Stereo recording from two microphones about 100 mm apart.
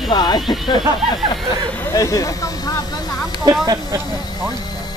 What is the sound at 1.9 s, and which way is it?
Speech, 35° left (ahead or behind).